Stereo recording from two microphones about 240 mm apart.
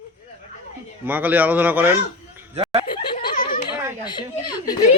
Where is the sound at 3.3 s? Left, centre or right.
Left.